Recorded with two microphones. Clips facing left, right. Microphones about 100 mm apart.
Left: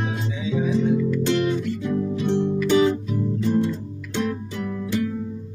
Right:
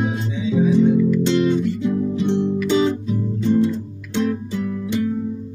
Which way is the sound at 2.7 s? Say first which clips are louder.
Left 1 dB; 20° right (ahead or behind).